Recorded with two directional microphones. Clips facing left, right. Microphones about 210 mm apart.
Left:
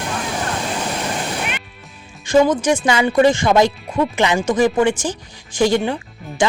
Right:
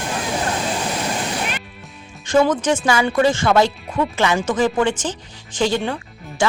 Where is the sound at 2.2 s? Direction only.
10° left (ahead or behind).